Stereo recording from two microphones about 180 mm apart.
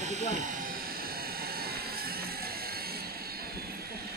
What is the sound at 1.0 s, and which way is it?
Vehicle, 55° right (ahead or behind).